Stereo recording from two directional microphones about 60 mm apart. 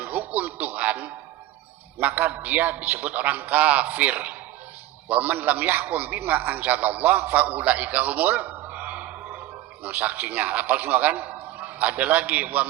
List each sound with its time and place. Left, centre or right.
0.0 s music: right
2.0 s a man's voice: right